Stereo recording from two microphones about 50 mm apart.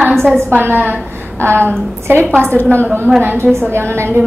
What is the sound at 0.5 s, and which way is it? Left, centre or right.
Speech, right.